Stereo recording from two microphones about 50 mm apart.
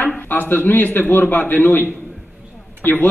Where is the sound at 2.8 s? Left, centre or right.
Left.